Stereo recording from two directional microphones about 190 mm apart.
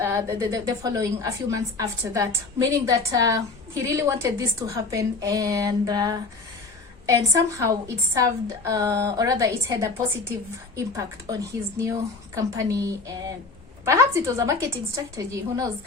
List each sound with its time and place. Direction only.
0.0 s a woman's voice: 15° right (ahead or behind)